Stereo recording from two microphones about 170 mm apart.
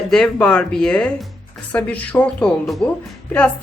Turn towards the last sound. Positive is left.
turn(degrees=10)  # may be behind; listen again after turning